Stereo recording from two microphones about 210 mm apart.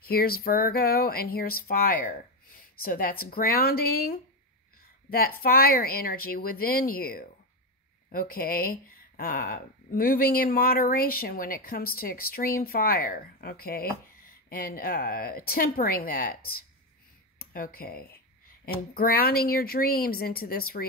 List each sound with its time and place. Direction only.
0.0 s speech: 45° left (ahead or behind)
17.4 s speech: 45° left (ahead or behind)